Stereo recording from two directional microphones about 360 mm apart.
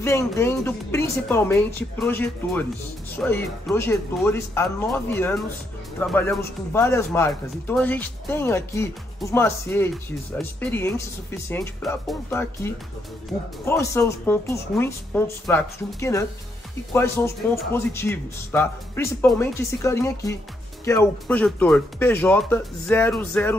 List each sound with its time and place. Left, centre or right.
0.0 s speech: centre